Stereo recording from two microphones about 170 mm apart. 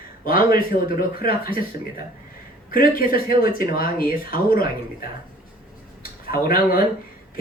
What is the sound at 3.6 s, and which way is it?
Speech, 60° left (ahead or behind).